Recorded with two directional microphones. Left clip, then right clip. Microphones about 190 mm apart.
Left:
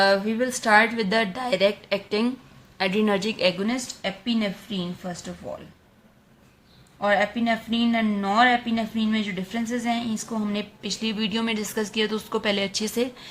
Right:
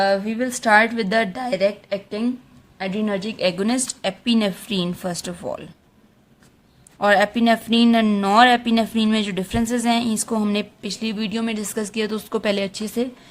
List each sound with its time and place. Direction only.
0.0 s a woman's voice: 15° right (ahead or behind)
3.6 s speech: 40° right (ahead or behind)
7.0 s speech: 40° right (ahead or behind); by 13.1 s 20° right (ahead or behind)